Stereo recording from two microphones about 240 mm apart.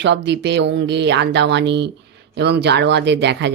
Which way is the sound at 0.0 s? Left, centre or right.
Right.